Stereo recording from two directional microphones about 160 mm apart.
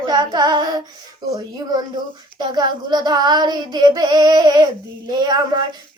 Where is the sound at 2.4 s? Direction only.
25° right (ahead or behind).